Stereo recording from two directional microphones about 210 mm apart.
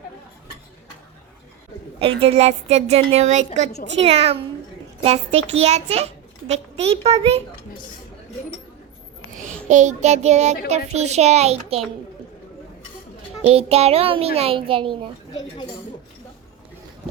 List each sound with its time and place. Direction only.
2.0 s a woman's voice: 25° right (ahead or behind)
9.3 s child singing: 35° right (ahead or behind)
10.7 s a woman's voice: 30° right (ahead or behind)
13.4 s a child's voice: 30° right (ahead or behind)